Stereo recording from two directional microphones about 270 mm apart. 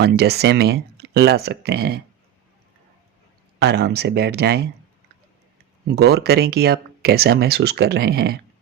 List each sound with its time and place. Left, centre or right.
0.0 s speech: right
3.6 s speech: right
6.0 s speech: right